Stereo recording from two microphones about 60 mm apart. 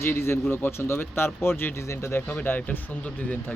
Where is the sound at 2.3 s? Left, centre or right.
Left.